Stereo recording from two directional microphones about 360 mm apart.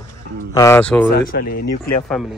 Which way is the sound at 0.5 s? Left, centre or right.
Centre.